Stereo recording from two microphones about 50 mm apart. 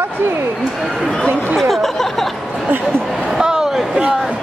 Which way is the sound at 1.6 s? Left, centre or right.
Centre.